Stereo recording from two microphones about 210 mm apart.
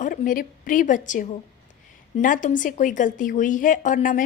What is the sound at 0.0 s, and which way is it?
A woman's voice, 40° left (ahead or behind).